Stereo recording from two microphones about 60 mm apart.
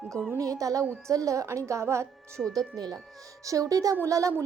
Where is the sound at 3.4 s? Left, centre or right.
Right.